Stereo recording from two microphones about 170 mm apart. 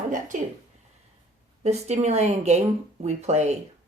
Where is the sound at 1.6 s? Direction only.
40° right (ahead or behind).